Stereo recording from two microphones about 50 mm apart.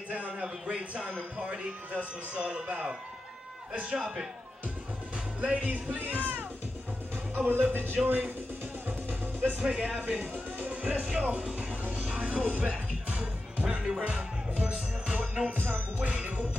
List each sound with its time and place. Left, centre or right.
0.3 s a man's voice: centre
5.4 s speech: right
7.3 s music: right
7.7 s speech: right
8.8 s music: right
9.6 s a man's voice: right
9.9 s speech: right
11.3 s music: right
11.8 s music: right
12.2 s music: right
13.8 s a man's voice: right
15.5 s speech: right